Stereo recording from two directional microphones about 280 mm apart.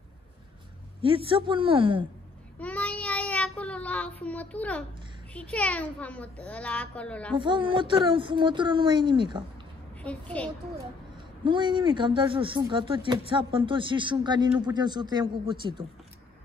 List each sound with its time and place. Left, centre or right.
1.0 s a woman's voice: centre
2.6 s child singing: centre
5.3 s a child's voice: centre
7.3 s speech: centre
10.0 s a child's voice: centre
11.4 s speech: centre